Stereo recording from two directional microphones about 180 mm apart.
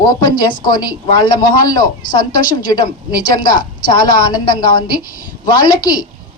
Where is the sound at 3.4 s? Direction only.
50° left (ahead or behind).